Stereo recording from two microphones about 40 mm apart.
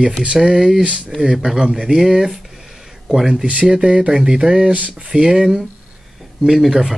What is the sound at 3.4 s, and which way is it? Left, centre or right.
Speech, right.